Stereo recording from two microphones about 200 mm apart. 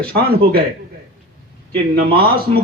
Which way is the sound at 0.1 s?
50° right (ahead or behind).